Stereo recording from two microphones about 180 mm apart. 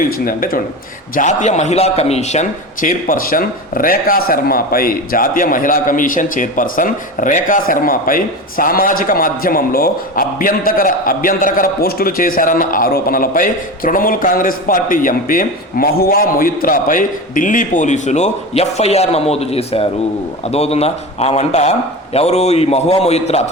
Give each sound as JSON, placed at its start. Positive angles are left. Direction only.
{"t": 0.0, "sound": "a man's voice", "side_deg": 50}